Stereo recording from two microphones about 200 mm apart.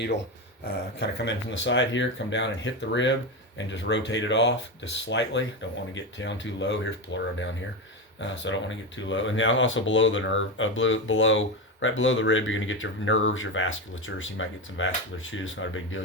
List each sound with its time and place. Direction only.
0.6 s speech: 55° left (ahead or behind); by 16.0 s 75° left (ahead or behind)